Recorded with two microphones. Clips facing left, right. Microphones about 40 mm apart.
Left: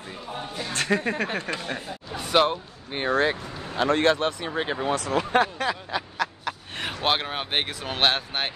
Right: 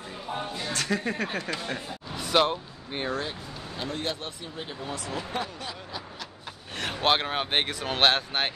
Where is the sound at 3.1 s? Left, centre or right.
Left.